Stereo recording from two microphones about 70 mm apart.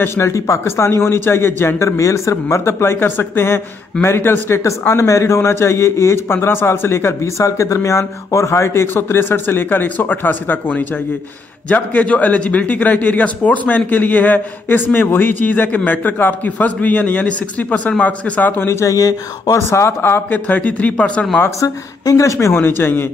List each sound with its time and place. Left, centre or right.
0.0 s a man's voice: left
4.6 s a man's voice: left
18.6 s a man's voice: left; by 21.3 s centre
21.5 s a woman's voice: left
22.5 s a man's voice: left